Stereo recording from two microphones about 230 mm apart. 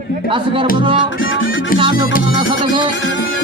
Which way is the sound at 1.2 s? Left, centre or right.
Left.